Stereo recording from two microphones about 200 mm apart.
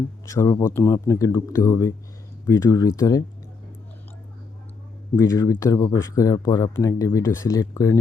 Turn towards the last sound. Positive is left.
turn(degrees=15)  # may be behind; listen again after turning